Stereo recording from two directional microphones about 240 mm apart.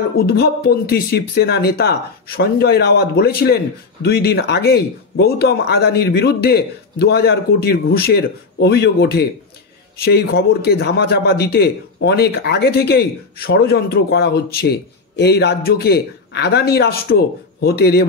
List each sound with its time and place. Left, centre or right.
0.3 s speech: left